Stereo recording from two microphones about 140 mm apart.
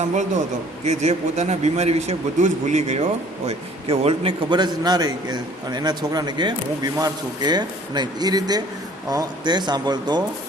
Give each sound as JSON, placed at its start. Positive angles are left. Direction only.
{"t": 0.9, "sound": "speech", "side_deg": -55}